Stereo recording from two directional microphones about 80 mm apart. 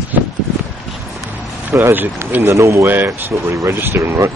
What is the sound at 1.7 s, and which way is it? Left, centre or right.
Speech, right.